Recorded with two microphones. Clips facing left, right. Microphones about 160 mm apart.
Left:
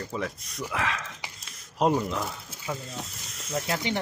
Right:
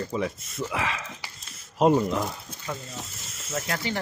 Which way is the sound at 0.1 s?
Centre (ahead or behind).